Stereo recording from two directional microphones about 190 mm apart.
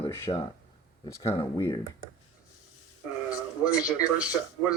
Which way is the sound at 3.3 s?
5° right (ahead or behind).